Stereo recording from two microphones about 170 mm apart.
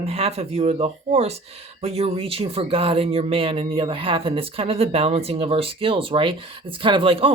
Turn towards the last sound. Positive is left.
turn(degrees=-30)  # may be behind; listen again after turning